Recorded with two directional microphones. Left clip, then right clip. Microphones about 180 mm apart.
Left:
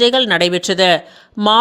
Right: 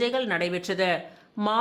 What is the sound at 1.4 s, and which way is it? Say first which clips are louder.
Speech: left 13 dB; 30° left (ahead or behind).